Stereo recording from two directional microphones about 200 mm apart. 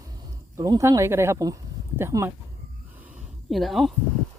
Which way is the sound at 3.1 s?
5° right (ahead or behind).